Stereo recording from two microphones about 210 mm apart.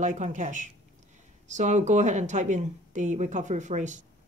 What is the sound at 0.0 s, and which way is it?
Speech, 35° right (ahead or behind).